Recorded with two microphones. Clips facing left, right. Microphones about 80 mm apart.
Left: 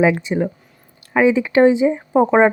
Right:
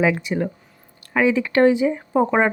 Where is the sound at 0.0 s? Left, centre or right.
Left.